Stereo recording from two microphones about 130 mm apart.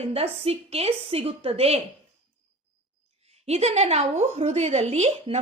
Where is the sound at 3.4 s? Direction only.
55° right (ahead or behind).